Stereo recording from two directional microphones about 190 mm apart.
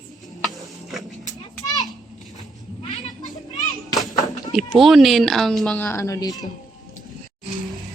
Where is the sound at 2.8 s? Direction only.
20° left (ahead or behind).